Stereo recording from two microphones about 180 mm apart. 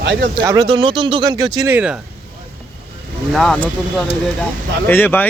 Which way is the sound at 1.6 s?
10° right (ahead or behind).